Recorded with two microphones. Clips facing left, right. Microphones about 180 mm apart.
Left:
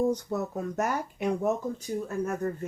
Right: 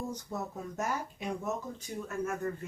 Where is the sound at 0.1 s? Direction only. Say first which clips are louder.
Left 9 dB; 70° left (ahead or behind).